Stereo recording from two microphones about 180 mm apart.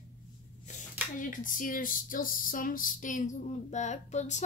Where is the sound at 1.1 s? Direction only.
45° left (ahead or behind).